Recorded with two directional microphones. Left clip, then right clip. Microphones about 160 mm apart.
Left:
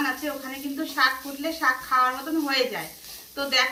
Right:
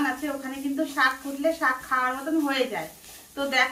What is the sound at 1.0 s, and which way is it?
Speech, 20° right (ahead or behind).